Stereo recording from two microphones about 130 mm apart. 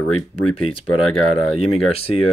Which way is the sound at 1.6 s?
50° left (ahead or behind).